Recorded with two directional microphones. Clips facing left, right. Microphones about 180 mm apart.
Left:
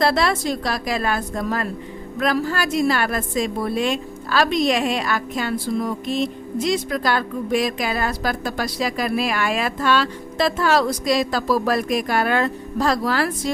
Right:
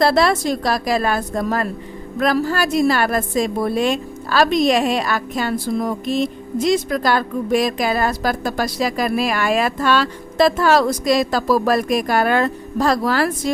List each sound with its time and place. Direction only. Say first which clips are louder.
0.0 s a woman's voice: right 4 dB; 40° right (ahead or behind)